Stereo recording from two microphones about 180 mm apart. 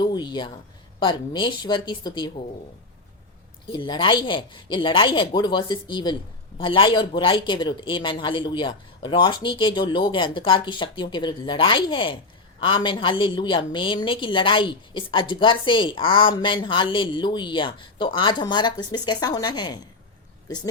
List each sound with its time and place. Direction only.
0.0 s a woman's voice: 25° left (ahead or behind)
3.7 s a woman's voice: 25° left (ahead or behind)